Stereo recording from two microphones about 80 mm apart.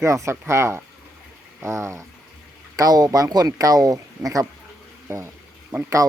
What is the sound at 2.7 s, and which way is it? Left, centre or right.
Speech, right.